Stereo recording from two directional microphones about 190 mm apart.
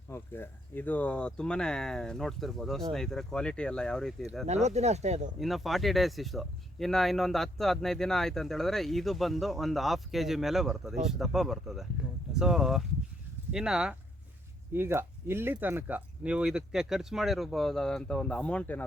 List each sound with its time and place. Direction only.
0.1 s speech: 10° left (ahead or behind)
4.4 s speech: 35° right (ahead or behind)
5.4 s speech: centre (ahead or behind)